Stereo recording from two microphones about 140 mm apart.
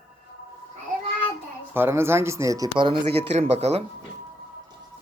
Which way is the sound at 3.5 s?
50° right (ahead or behind).